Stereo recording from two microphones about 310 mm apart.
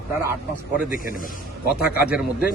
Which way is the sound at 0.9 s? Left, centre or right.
Left.